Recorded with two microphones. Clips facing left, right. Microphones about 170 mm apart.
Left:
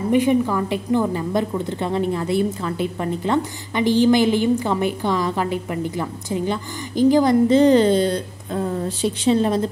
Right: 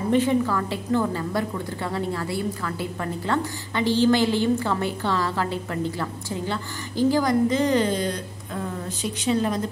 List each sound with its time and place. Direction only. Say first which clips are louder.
0.1 s a woman's voice: left 3 dB; 15° left (ahead or behind)